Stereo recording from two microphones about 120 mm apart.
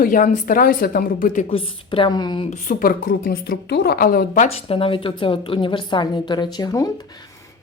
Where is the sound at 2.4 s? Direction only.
75° left (ahead or behind).